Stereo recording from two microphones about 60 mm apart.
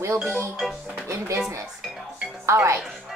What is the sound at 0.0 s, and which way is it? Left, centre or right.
Speech, right.